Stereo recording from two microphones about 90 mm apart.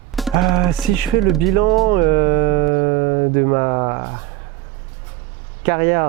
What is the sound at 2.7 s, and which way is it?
Speech, 20° right (ahead or behind).